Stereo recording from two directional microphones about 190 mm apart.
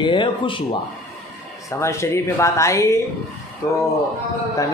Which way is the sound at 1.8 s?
15° left (ahead or behind).